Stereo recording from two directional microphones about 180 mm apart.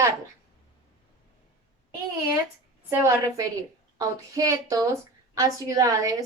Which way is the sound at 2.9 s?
15° right (ahead or behind).